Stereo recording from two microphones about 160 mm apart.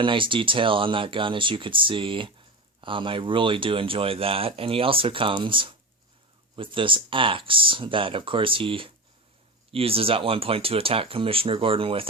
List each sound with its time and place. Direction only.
0.0 s speech: 30° right (ahead or behind)